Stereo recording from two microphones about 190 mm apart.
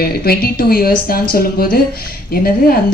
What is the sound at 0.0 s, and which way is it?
Speech, 55° left (ahead or behind).